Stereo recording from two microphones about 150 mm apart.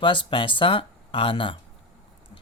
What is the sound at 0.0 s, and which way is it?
Speech, 35° left (ahead or behind).